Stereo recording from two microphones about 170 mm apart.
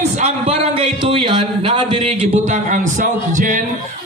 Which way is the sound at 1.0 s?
30° right (ahead or behind).